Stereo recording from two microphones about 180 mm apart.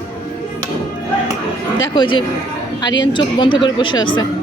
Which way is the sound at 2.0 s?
25° left (ahead or behind).